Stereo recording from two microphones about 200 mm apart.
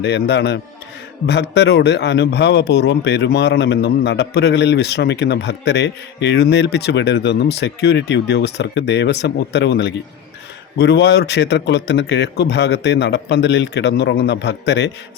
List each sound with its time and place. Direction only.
0.0 s a man's voice: 60° left (ahead or behind)